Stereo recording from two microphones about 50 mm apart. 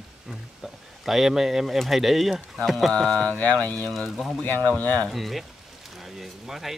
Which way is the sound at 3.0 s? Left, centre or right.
Left.